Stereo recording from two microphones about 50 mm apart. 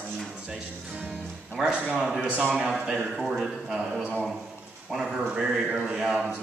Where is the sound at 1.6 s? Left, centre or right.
Centre.